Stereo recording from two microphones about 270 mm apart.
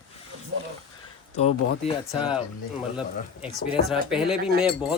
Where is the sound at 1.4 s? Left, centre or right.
Left.